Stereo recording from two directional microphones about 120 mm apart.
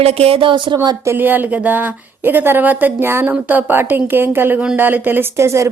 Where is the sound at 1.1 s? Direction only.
15° right (ahead or behind).